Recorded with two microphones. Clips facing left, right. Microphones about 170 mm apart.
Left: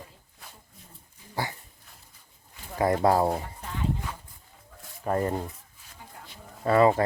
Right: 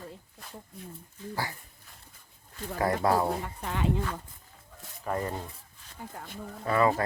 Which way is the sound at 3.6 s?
80° right.